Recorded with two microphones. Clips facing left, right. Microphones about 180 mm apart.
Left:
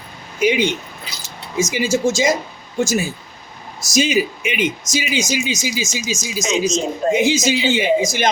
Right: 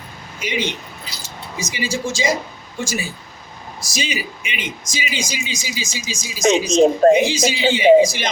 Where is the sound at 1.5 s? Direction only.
50° left (ahead or behind).